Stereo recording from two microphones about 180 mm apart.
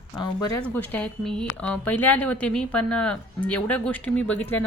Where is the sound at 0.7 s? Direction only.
10° left (ahead or behind).